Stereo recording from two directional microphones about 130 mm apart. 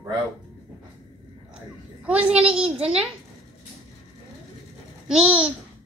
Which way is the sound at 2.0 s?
10° right (ahead or behind).